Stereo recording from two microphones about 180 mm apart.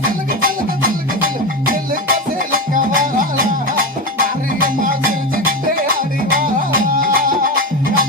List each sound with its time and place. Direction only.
2.5 s music: 50° right (ahead or behind)
4.6 s music: 50° right (ahead or behind)
6.3 s music: 50° right (ahead or behind)